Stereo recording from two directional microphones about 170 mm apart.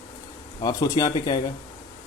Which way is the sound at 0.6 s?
20° left (ahead or behind).